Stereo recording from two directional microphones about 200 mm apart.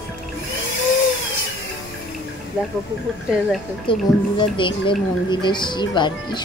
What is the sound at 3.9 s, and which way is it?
Speech, 25° left (ahead or behind).